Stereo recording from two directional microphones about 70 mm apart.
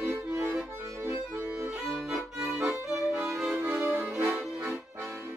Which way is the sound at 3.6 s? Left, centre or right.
Right.